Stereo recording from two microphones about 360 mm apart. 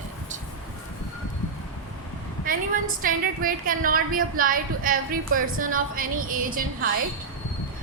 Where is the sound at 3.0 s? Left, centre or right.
Right.